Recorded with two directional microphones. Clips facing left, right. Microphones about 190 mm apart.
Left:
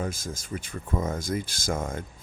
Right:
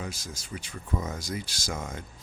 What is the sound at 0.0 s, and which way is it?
Speech, 50° left (ahead or behind).